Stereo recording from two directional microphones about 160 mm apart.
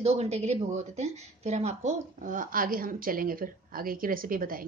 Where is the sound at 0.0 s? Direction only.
40° right (ahead or behind).